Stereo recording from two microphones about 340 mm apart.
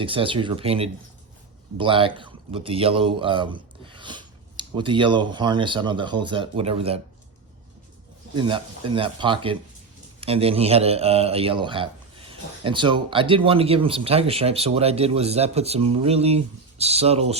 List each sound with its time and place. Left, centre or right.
0.0 s speech: centre
8.4 s speech: centre